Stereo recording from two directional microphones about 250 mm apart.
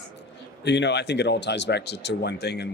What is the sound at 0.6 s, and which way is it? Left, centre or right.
Speech, left.